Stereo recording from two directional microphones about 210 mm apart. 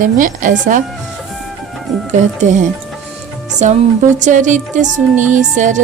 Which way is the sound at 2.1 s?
35° right (ahead or behind).